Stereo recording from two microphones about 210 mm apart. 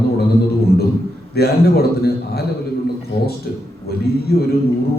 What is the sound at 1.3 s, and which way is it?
A man's voice, 50° left (ahead or behind).